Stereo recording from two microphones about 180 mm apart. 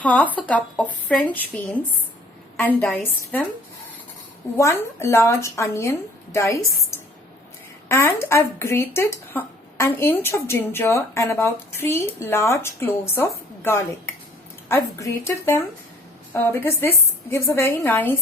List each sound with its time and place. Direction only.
0.0 s speech: 10° left (ahead or behind)
4.5 s speech: 15° left (ahead or behind)
7.9 s a woman's voice: 15° left (ahead or behind)